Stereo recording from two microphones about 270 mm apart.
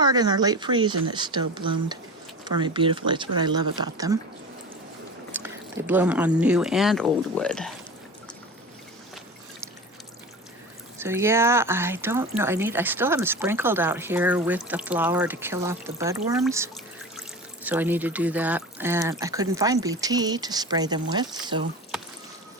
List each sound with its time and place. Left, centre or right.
0.0 s speech: centre
5.3 s speech: centre
10.9 s speech: centre